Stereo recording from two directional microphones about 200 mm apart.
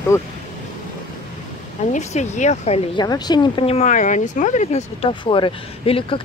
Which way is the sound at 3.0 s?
20° left (ahead or behind).